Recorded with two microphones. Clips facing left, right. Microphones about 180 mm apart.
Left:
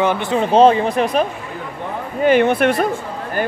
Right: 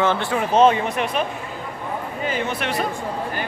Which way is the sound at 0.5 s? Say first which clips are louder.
Left 4 dB; 35° left (ahead or behind).